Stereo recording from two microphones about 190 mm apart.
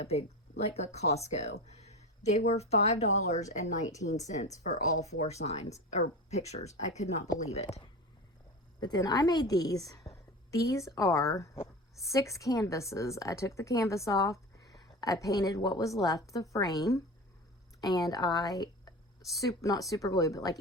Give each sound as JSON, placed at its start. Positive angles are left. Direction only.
{"t": 0.0, "sound": "speech", "side_deg": 35}
{"t": 1.7, "sound": "a sound", "side_deg": 35}
{"t": 2.5, "sound": "speech", "side_deg": 35}
{"t": 8.8, "sound": "a woman's voice", "side_deg": 20}
{"t": 17.7, "sound": "a woman's voice", "side_deg": 20}